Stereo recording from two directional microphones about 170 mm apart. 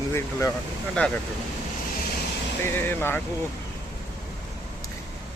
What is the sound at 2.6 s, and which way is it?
Speech, 10° left (ahead or behind).